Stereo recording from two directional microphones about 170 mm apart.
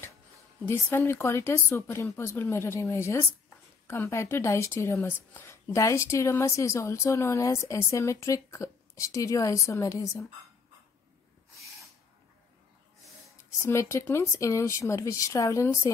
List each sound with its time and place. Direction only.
0.6 s a woman's voice: 15° left (ahead or behind)
13.6 s a woman's voice: 15° left (ahead or behind)